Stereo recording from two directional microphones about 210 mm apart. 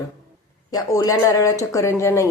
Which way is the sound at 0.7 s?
15° left (ahead or behind).